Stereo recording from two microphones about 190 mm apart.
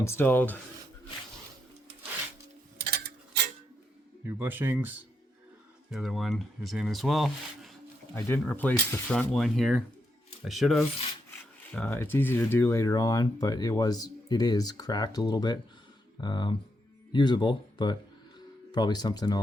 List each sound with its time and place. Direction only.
0.0 s speech: 10° left (ahead or behind)
2.8 s tick-tock: 55° right (ahead or behind)
4.3 s speech: 10° right (ahead or behind)
8.1 s speech: 10° left (ahead or behind)